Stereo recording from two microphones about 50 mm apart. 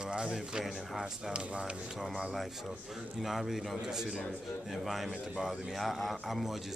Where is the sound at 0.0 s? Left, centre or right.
Centre.